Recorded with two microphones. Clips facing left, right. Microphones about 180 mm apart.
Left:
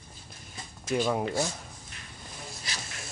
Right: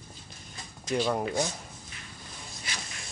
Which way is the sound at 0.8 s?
5° left (ahead or behind).